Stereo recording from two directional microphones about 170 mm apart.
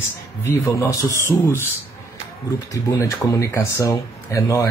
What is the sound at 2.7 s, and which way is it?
Speech, 20° left (ahead or behind).